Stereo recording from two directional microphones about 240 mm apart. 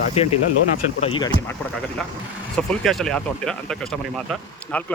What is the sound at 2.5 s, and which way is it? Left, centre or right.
Speech, centre.